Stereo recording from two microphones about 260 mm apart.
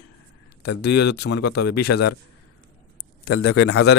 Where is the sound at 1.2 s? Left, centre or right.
Left.